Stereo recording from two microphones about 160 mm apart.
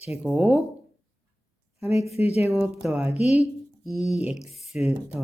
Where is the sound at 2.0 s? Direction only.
40° left (ahead or behind).